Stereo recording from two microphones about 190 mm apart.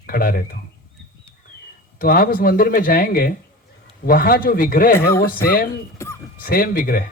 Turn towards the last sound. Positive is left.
turn(degrees=50)  # may be behind; listen again after turning